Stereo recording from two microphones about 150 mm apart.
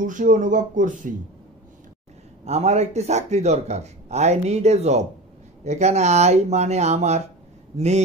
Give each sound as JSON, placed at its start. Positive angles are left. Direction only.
{"t": 0.0, "sound": "speech", "side_deg": -60}
{"t": 2.4, "sound": "a man's voice", "side_deg": -45}